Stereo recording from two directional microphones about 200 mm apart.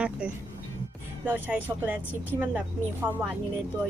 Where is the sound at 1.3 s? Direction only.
10° right (ahead or behind).